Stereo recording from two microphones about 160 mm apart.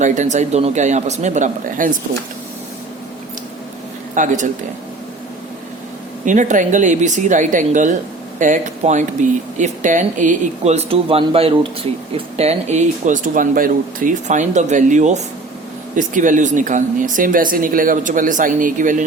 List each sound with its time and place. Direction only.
0.0 s speech: 50° right (ahead or behind)
4.1 s speech: 50° right (ahead or behind)
6.2 s speech: 50° right (ahead or behind)